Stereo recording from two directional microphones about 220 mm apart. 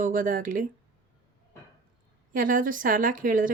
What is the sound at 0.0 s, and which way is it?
Speech, 40° right (ahead or behind).